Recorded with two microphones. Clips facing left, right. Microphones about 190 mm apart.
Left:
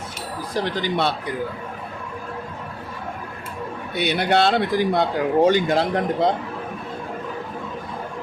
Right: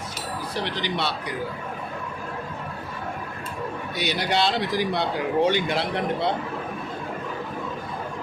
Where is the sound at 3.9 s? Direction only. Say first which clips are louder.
Left 6 dB; 55° left (ahead or behind).